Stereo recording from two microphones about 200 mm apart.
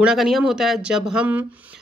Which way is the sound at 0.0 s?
Centre (ahead or behind).